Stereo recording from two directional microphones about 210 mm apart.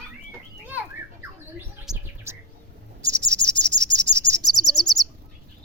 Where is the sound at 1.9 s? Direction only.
Centre (ahead or behind).